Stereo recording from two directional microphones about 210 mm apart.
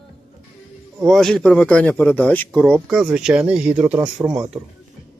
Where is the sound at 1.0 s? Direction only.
Centre (ahead or behind).